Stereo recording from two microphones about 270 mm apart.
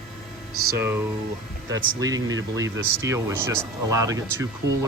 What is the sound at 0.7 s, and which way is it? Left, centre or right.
Speech, centre.